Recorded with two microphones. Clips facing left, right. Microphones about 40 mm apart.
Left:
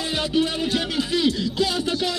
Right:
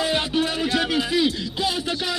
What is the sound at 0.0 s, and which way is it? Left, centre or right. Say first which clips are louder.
Music: even; centre.